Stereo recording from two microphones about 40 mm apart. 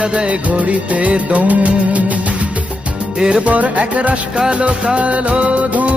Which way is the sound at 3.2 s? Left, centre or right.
Right.